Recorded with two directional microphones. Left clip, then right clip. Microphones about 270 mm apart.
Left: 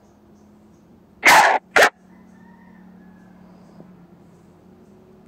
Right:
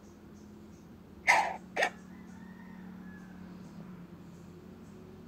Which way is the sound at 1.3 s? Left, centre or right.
Left.